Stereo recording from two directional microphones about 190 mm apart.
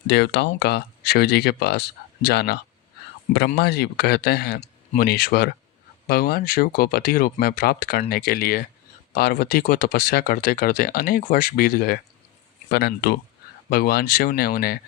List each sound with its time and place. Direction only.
0.1 s speech: 60° left (ahead or behind)